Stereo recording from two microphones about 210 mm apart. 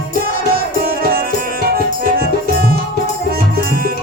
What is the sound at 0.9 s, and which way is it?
Music, 45° right (ahead or behind).